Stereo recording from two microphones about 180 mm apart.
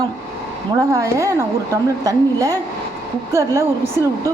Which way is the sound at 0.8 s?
20° right (ahead or behind).